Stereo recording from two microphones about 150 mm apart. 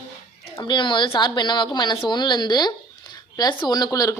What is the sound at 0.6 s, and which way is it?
A woman's voice, 30° left (ahead or behind).